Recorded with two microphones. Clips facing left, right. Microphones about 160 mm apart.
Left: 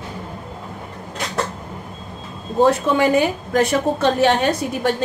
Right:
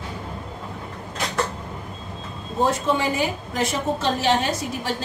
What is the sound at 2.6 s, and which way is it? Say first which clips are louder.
A woman's voice: left 6 dB; 65° left (ahead or behind).